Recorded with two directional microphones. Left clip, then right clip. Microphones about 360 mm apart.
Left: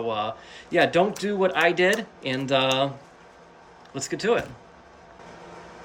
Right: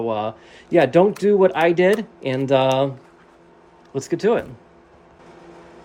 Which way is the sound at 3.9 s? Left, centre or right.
Centre.